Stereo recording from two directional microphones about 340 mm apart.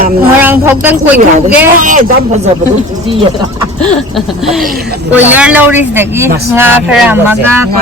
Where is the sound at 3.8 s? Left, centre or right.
Centre.